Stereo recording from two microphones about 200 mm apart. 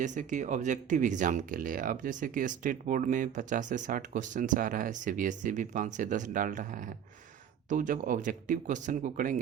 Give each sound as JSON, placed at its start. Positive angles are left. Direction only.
{"t": 0.0, "sound": "speech", "side_deg": -40}